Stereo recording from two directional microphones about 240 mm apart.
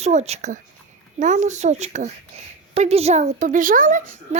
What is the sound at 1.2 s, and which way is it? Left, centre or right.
A child's voice, right.